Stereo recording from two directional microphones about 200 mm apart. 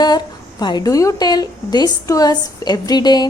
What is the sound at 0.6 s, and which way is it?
A woman's voice, 20° left (ahead or behind).